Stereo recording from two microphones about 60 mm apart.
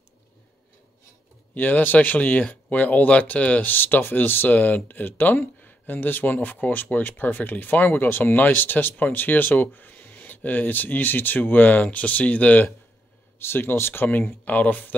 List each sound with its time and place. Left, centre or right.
1.5 s speech: left
13.4 s speech: left